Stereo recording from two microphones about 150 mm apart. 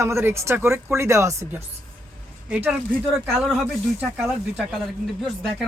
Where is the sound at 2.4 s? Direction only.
5° right (ahead or behind).